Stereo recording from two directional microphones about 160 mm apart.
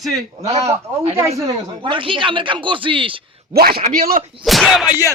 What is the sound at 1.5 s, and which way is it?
Speech, 30° right (ahead or behind).